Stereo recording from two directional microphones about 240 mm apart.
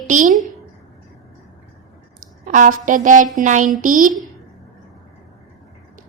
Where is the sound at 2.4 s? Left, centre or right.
Right.